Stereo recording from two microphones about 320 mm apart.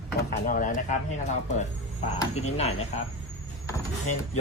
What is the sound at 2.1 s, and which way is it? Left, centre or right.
Speech, centre.